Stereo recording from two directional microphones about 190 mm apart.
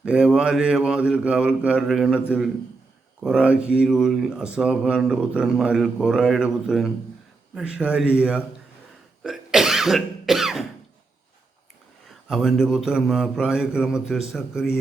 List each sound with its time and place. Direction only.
0.0 s speech: 5° right (ahead or behind)
9.2 s throat clearing: centre (ahead or behind)
12.0 s speech: centre (ahead or behind)